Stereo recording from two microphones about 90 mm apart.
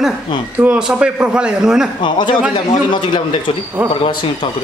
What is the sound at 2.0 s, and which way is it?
A man's voice, 60° left (ahead or behind).